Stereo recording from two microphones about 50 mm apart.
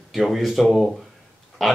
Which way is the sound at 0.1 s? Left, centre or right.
Centre.